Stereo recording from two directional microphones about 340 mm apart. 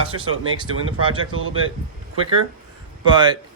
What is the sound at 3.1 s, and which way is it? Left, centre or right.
Speech, centre.